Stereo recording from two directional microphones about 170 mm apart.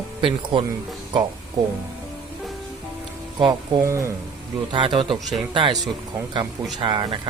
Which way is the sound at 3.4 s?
25° right (ahead or behind).